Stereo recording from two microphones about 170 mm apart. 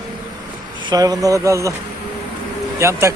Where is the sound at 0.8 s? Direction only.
20° right (ahead or behind).